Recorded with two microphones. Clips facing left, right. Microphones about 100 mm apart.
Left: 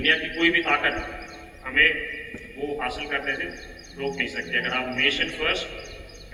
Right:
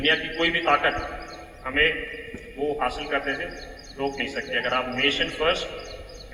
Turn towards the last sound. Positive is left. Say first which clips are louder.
# right 3 dB
turn(degrees=-35)  # may be behind; listen again after turning